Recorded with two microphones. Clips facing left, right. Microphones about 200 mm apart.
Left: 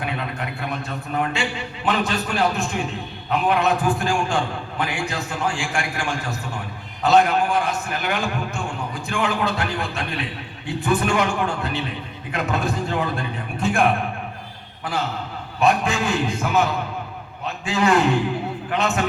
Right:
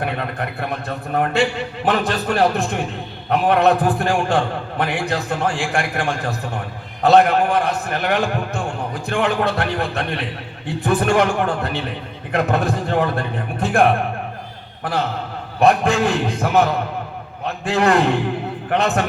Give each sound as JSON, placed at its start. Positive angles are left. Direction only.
{"t": 0.0, "sound": "a sound", "side_deg": -55}
{"t": 0.9, "sound": "a man's voice", "side_deg": -55}
{"t": 15.6, "sound": "a man's voice", "side_deg": -60}
{"t": 17.7, "sound": "a man's voice", "side_deg": -55}